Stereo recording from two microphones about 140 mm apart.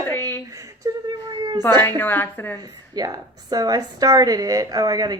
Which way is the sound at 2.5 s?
25° right (ahead or behind).